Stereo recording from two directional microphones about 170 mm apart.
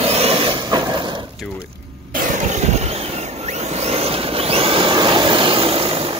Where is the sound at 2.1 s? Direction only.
45° right (ahead or behind).